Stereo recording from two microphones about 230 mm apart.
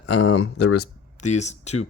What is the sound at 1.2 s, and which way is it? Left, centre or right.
Speech, left.